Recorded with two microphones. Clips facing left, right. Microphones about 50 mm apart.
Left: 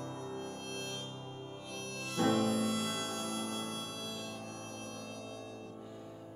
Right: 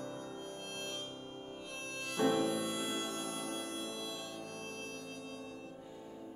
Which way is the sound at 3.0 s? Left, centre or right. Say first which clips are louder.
Left 2 dB; left.